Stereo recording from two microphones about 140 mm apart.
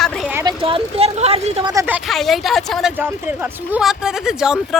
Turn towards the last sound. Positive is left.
turn(degrees=-5)  # may be behind; listen again after turning